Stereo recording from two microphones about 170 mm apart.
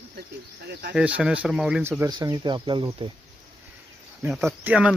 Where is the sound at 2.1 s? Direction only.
25° right (ahead or behind).